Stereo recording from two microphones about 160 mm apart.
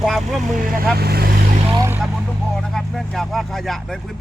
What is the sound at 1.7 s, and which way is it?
Vehicle, 20° right (ahead or behind).